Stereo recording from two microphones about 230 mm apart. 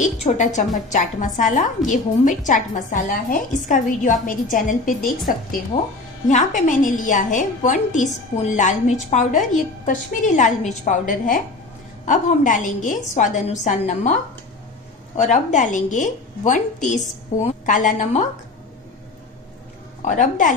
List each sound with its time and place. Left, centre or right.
0.0 s a woman's voice: left
5.7 s a woman's voice: left
15.1 s a woman's voice: left
20.1 s a woman's voice: left